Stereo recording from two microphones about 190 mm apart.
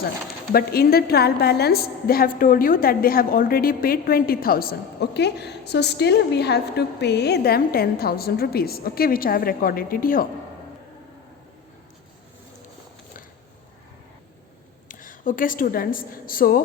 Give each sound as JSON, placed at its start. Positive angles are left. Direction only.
{"t": 0.5, "sound": "a woman's voice", "side_deg": 55}
{"t": 14.8, "sound": "a woman's voice", "side_deg": 45}